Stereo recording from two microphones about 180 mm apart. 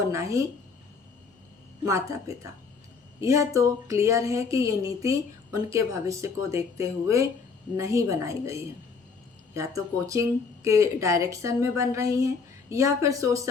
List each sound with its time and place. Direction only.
0.1 s a woman's voice: 15° right (ahead or behind)
1.8 s a woman's voice: 15° right (ahead or behind)